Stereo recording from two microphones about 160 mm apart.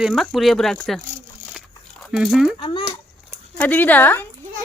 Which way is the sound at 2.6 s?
35° left (ahead or behind).